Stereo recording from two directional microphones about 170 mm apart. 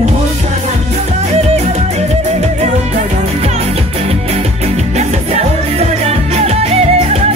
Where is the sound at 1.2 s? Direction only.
40° right (ahead or behind).